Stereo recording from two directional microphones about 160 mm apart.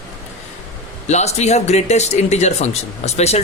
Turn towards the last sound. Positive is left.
turn(degrees=40)  # may be behind; listen again after turning